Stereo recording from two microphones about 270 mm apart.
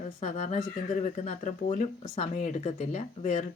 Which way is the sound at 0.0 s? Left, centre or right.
Left.